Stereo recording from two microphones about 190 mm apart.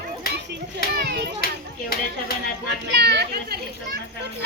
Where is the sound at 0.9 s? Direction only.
60° right (ahead or behind).